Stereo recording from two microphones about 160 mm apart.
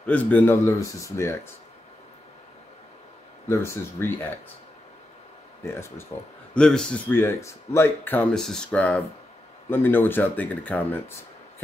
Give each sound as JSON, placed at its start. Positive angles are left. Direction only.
{"t": 0.0, "sound": "speech", "side_deg": 10}
{"t": 3.4, "sound": "speech", "side_deg": 15}
{"t": 6.5, "sound": "speech", "side_deg": 5}